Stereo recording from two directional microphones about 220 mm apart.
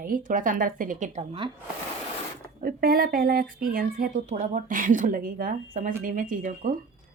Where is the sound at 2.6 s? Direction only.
45° right (ahead or behind).